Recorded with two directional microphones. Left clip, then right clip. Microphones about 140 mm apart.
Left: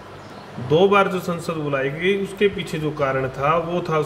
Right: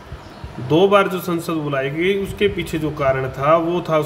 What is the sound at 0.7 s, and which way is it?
A man's voice, 55° right (ahead or behind).